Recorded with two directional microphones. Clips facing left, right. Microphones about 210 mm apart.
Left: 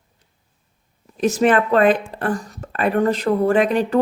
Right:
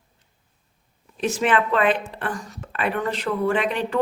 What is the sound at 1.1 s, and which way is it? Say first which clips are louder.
A woman's voice: left 5 dB; 40° left (ahead or behind).